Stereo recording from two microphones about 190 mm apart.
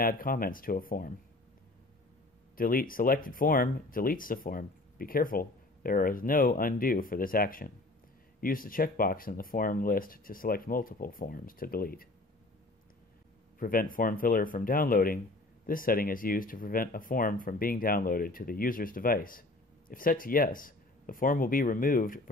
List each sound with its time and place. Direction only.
0.0 s speech: 50° left (ahead or behind)
2.5 s speech: 50° left (ahead or behind)
13.6 s speech: 45° left (ahead or behind)